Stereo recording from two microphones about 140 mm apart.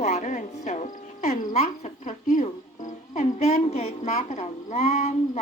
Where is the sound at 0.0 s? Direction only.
55° left (ahead or behind).